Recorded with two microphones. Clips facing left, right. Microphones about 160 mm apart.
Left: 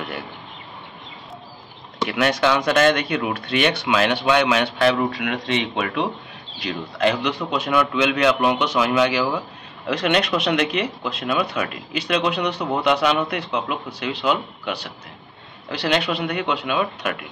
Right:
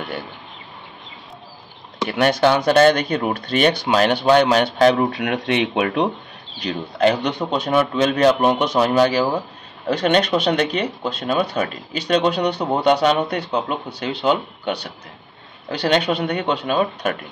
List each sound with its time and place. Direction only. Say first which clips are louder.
2.0 s speech: right 3 dB; 35° right (ahead or behind)
6.7 s speech: right 3 dB; 35° right (ahead or behind)
15.9 s speech: right 3 dB; 35° right (ahead or behind)